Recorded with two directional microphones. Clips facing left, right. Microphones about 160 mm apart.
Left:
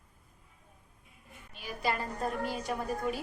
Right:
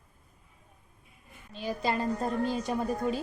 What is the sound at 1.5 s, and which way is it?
A woman's voice, 25° right (ahead or behind).